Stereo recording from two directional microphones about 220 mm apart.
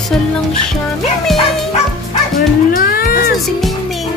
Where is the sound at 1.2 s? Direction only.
Centre (ahead or behind).